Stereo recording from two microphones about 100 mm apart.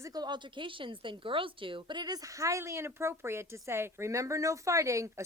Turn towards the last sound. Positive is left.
turn(degrees=-30)  # may be behind; listen again after turning